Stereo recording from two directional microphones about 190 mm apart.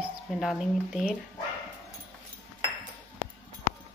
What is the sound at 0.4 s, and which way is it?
Dishes, centre (ahead or behind).